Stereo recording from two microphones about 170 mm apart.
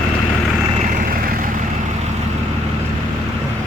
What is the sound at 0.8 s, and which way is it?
Vehicle, 55° right (ahead or behind).